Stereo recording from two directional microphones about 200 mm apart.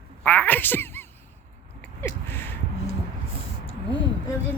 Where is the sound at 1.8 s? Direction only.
10° left (ahead or behind).